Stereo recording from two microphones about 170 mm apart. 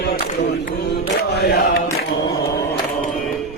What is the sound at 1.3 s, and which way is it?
Chant, 75° left (ahead or behind).